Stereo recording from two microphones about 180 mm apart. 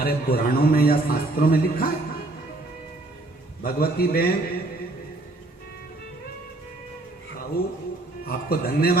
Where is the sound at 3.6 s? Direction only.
55° left (ahead or behind).